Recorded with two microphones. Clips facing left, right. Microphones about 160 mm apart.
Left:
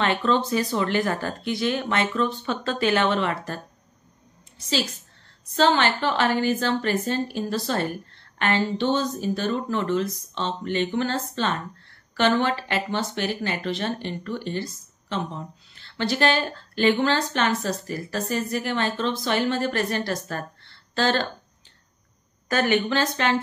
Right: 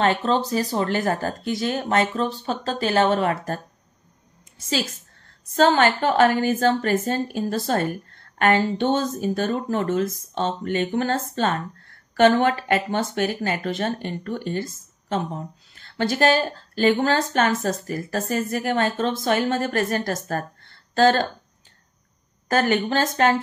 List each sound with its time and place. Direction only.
0.0 s a woman's voice: 40° right (ahead or behind)
22.5 s a woman's voice: 40° right (ahead or behind)